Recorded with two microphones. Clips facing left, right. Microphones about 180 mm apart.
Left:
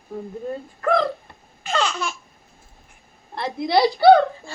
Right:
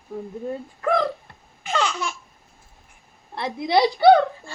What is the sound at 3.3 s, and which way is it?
Speech, 15° right (ahead or behind).